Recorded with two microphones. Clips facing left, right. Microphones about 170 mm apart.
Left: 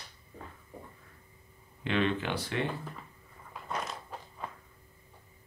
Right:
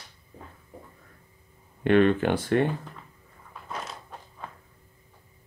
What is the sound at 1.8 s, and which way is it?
Speech, 50° right (ahead or behind).